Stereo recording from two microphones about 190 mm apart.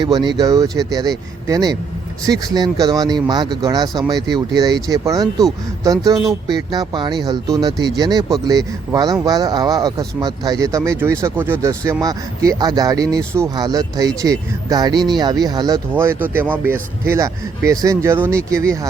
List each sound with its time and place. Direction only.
0.0 s speech: 25° right (ahead or behind)